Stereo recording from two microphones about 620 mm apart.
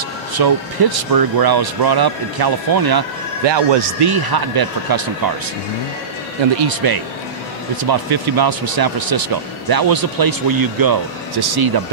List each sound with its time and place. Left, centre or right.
0.3 s speech: right
6.7 s speech: right